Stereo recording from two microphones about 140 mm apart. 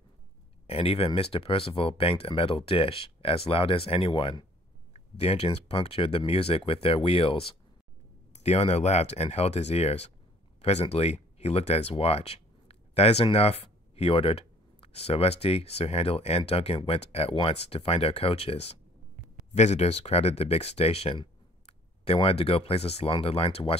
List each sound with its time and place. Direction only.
0.7 s speech: 45° left (ahead or behind)